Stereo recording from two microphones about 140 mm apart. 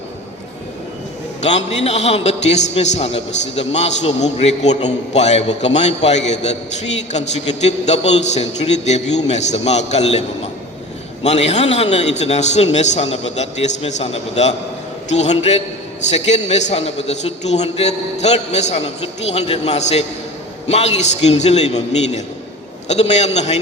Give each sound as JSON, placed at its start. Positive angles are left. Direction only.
{"t": 1.4, "sound": "a man's voice", "side_deg": 50}